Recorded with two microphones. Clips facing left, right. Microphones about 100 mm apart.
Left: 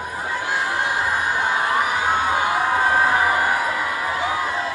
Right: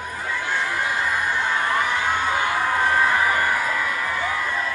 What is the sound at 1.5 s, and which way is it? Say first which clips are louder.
Crowd: left 2 dB; 15° left (ahead or behind).